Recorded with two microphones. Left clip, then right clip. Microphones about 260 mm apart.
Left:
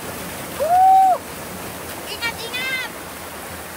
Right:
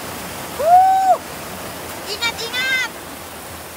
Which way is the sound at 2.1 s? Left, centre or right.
Right.